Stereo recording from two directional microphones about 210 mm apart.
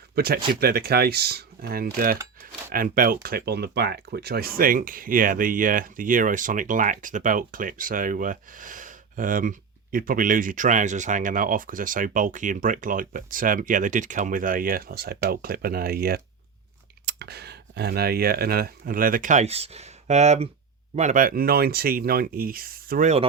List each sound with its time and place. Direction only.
0.2 s speech: 45° right (ahead or behind)